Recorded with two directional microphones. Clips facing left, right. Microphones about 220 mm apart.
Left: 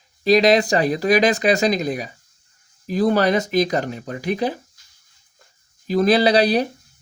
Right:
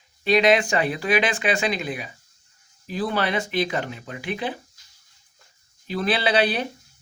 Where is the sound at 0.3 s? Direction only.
35° left (ahead or behind).